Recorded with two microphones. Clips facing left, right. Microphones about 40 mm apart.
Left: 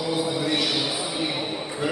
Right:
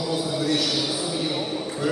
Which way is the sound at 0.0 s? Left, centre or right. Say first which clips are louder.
Even; left.